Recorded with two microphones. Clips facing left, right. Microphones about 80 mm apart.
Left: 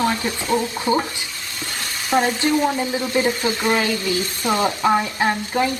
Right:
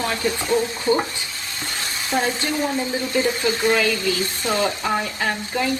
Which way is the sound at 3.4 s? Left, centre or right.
Left.